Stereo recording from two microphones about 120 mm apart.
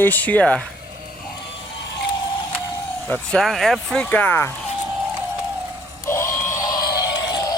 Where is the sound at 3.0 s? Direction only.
10° left (ahead or behind).